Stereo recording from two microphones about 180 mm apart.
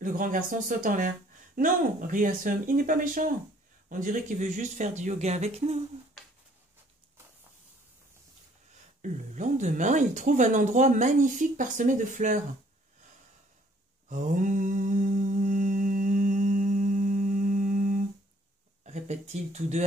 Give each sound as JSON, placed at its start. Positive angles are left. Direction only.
{"t": 0.0, "sound": "speech", "side_deg": -50}
{"t": 9.0, "sound": "speech", "side_deg": -45}
{"t": 14.0, "sound": "mantra", "side_deg": -45}
{"t": 18.9, "sound": "speech", "side_deg": -40}